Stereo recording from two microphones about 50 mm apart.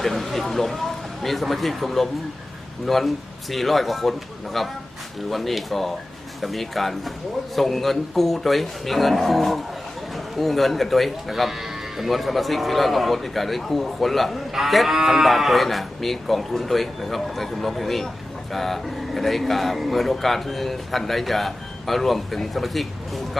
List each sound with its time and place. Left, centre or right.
0.0 s speech: centre